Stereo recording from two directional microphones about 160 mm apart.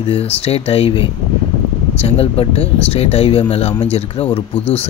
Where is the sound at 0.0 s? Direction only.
35° left (ahead or behind).